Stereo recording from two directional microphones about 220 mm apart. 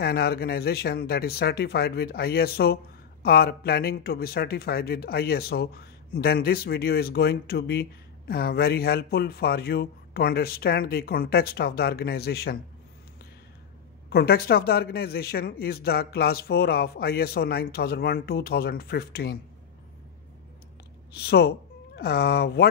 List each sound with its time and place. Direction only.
0.0 s speech: 45° left (ahead or behind)
14.1 s speech: 45° left (ahead or behind)
21.1 s speech: 45° left (ahead or behind)